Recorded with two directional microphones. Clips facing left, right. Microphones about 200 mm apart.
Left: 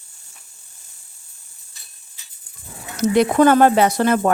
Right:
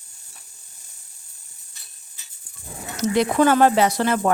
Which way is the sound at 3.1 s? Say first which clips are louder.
Left 4 dB; 55° left (ahead or behind).